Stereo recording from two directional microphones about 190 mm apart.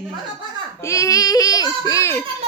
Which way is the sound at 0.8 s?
15° left (ahead or behind).